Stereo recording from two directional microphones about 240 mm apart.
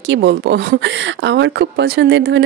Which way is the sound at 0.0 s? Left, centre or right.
Right.